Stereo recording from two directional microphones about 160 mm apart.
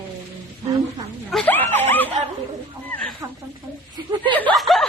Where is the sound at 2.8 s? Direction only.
10° left (ahead or behind).